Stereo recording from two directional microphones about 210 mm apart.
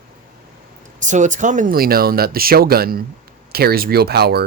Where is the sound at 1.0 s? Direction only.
35° right (ahead or behind).